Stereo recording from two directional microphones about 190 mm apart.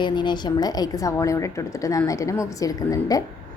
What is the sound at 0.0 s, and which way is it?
A woman's voice, 25° left (ahead or behind).